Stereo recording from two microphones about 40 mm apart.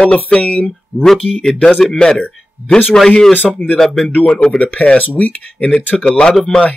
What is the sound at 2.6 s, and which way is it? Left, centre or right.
Speech, right.